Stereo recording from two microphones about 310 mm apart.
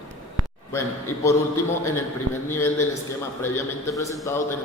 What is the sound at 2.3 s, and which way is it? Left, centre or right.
Speech, right.